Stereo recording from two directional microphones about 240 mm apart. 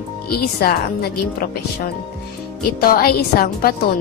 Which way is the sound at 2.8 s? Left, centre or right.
Left.